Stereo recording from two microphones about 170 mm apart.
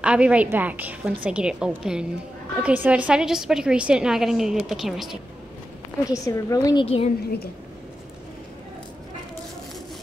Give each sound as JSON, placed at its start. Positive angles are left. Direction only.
{"t": 0.0, "sound": "a woman's voice", "side_deg": -5}
{"t": 6.1, "sound": "a woman's voice", "side_deg": 20}